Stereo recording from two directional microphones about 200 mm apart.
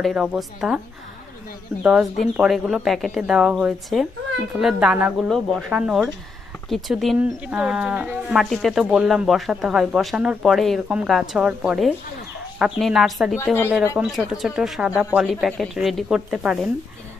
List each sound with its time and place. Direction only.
0.0 s speech: 5° right (ahead or behind)
1.8 s speech: 5° right (ahead or behind)